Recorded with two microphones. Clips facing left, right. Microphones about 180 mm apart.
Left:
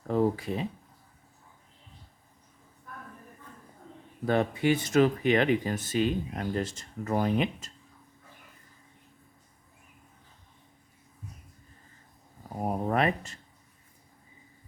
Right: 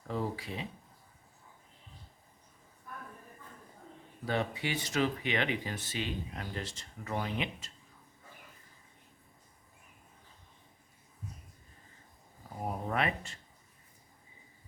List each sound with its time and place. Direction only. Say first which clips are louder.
0.1 s speech: left 10 dB; 50° left (ahead or behind)
4.3 s speech: left 8 dB; 50° left (ahead or behind)
12.6 s speech: left 6 dB; 40° left (ahead or behind)